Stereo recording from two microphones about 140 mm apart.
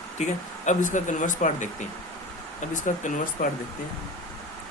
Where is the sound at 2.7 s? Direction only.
65° left (ahead or behind).